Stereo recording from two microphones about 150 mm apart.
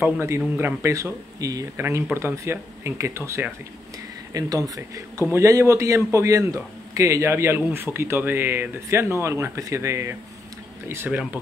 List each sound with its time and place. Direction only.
0.0 s a man's voice: 15° right (ahead or behind)